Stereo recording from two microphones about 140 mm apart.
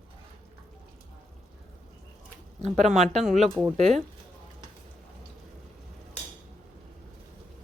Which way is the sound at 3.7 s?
50° right (ahead or behind).